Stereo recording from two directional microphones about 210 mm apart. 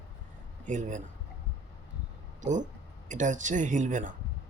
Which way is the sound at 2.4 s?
35° right (ahead or behind).